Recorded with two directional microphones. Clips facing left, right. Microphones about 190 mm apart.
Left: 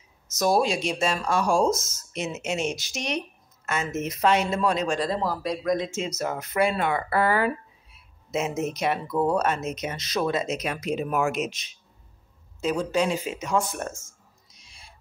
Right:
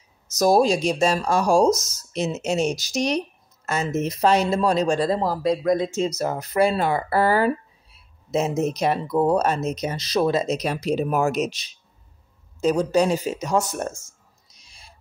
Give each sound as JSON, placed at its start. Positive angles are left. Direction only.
{"t": 0.3, "sound": "speech", "side_deg": -40}
{"t": 14.5, "sound": "owl", "side_deg": -40}